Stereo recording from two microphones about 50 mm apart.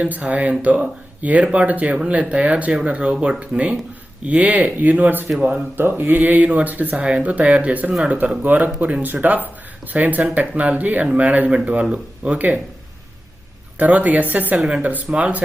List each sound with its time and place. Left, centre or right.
0.0 s speech: right
5.7 s speech: right
13.7 s speech: right